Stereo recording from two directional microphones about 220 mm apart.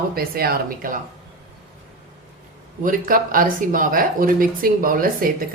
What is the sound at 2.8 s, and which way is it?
Speech, 40° right (ahead or behind).